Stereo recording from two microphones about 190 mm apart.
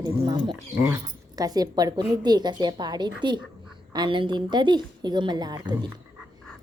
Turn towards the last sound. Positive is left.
turn(degrees=-20)  # may be behind; listen again after turning